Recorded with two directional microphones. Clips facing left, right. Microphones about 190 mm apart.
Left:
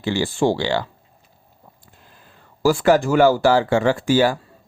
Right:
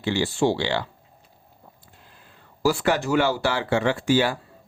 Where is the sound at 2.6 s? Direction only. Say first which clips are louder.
Left 6 dB; 45° left (ahead or behind).